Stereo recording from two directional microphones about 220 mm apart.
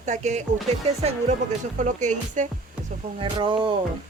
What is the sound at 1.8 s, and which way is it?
Speech, 35° right (ahead or behind).